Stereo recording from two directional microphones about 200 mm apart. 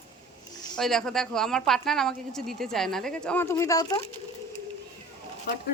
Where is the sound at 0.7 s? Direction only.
Centre (ahead or behind); by 4.0 s 20° left (ahead or behind).